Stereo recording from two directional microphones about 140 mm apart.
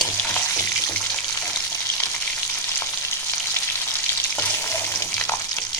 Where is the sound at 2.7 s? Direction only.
15° left (ahead or behind).